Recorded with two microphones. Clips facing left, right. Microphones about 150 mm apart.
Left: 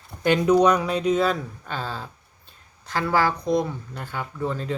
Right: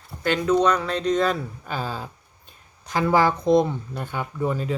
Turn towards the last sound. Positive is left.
turn(degrees=-10)  # may be behind; listen again after turning